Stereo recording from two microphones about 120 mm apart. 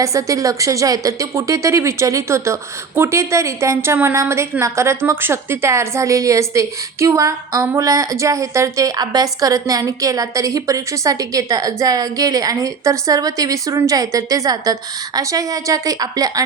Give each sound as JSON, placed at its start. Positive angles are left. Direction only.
{"t": 0.0, "sound": "a woman's voice", "side_deg": -25}